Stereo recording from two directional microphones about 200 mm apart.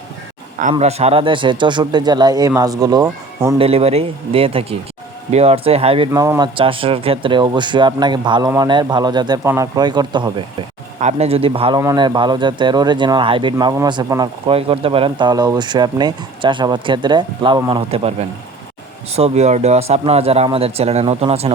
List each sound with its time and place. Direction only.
0.7 s speech: 30° right (ahead or behind)
3.6 s speech: 30° right (ahead or behind)
6.1 s speech: 15° right (ahead or behind); by 21.5 s 30° right (ahead or behind)